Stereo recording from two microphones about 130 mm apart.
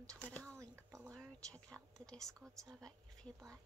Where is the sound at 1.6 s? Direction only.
25° right (ahead or behind).